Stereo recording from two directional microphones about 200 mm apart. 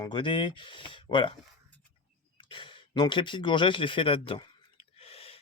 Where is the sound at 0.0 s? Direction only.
25° left (ahead or behind).